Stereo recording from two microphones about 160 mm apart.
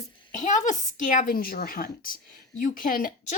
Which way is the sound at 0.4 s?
50° left (ahead or behind).